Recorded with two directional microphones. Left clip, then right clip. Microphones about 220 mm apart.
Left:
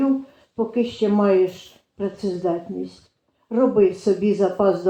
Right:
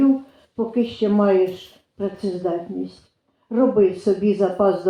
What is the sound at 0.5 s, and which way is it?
Speech, 35° left (ahead or behind).